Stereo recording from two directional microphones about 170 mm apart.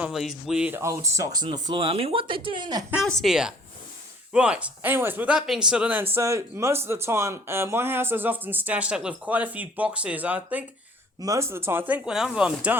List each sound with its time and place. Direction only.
0.1 s speech: centre (ahead or behind); by 2.8 s 25° right (ahead or behind)
3.1 s speech: centre (ahead or behind)